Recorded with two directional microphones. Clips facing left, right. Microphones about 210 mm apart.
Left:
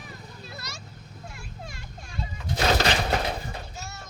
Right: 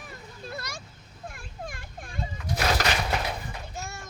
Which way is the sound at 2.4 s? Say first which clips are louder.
Left 3 dB; 25° left (ahead or behind).